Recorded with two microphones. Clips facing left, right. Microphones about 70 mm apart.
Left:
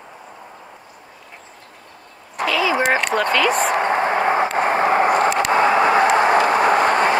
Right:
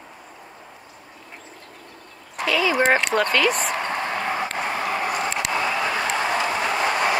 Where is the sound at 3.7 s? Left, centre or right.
Left.